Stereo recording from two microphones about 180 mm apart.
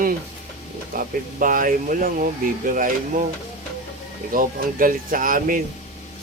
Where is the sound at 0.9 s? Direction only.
50° right (ahead or behind).